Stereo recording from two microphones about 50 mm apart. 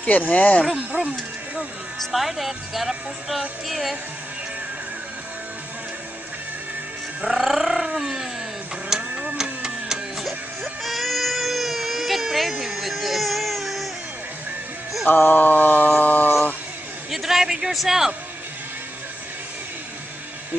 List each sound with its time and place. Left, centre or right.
0.3 s speech: left
0.7 s speech: right
2.0 s speech: centre
7.3 s speech: centre
8.9 s tick-tock: centre
9.4 s a sound: centre
10.8 s baby cry: centre
15.0 s a sound: left
17.1 s a man's voice: centre